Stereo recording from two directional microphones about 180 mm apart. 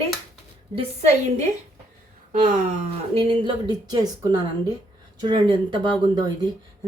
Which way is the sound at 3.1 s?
30° right (ahead or behind).